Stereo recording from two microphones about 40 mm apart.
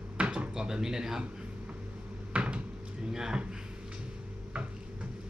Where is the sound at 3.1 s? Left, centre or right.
Centre.